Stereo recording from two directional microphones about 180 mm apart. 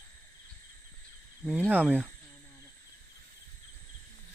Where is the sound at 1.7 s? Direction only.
10° right (ahead or behind).